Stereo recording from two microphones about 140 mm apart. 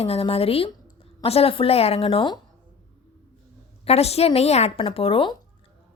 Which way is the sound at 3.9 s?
45° left (ahead or behind).